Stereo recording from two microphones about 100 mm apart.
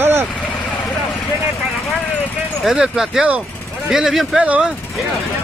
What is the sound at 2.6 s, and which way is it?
Speech, 5° right (ahead or behind).